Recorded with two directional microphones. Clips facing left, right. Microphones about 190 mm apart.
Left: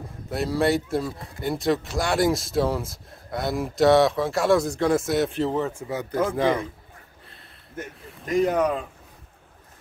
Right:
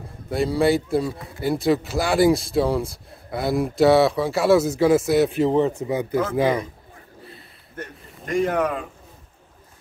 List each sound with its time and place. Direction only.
0.3 s speech: centre (ahead or behind)
5.5 s a man's voice: 20° right (ahead or behind)
7.7 s a sound: 5° left (ahead or behind)
8.5 s speech: centre (ahead or behind)